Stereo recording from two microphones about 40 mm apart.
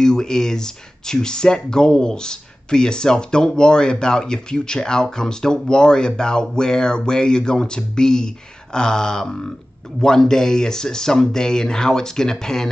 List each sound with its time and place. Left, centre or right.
0.0 s speech: centre